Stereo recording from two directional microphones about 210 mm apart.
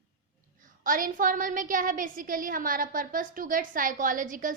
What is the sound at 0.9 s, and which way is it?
A woman's voice, 40° right (ahead or behind).